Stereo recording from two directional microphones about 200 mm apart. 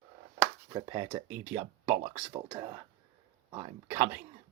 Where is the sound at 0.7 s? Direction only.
20° right (ahead or behind).